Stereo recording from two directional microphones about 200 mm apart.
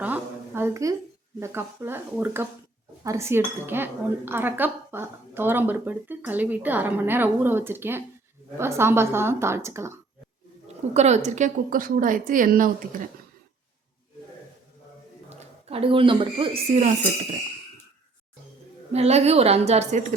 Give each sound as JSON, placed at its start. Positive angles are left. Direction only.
{"t": 0.0, "sound": "a sound", "side_deg": -10}
{"t": 1.4, "sound": "speech", "side_deg": -10}
{"t": 10.9, "sound": "a woman's voice", "side_deg": -35}
{"t": 15.4, "sound": "speech", "side_deg": -30}
{"t": 18.9, "sound": "a woman's voice", "side_deg": -30}